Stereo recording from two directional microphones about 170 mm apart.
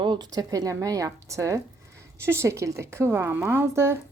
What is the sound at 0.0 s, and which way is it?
A woman's voice, 25° right (ahead or behind).